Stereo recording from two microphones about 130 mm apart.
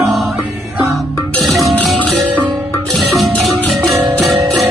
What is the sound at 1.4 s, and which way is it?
Music, centre (ahead or behind).